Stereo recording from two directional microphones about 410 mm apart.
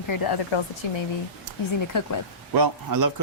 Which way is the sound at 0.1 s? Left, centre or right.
Left.